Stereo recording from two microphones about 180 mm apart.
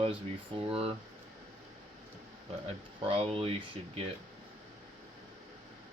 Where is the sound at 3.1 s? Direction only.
35° right (ahead or behind).